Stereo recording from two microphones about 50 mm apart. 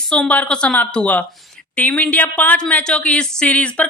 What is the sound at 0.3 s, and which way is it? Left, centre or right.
Speech, left.